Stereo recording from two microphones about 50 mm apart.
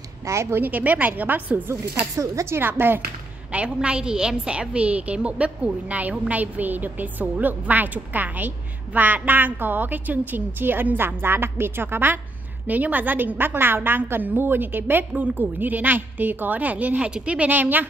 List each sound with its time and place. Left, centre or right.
0.2 s a woman's voice: right
0.6 s a woman's voice: right
2.1 s speech: right
2.6 s a woman's voice: right
3.5 s a woman's voice: right
12.6 s a woman's voice: right
17.5 s a woman's voice: right